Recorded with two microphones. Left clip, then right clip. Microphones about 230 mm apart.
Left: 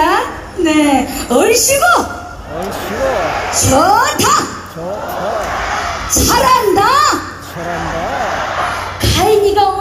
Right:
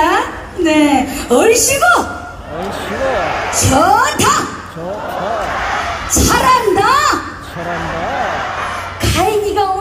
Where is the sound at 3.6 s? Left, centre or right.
Centre.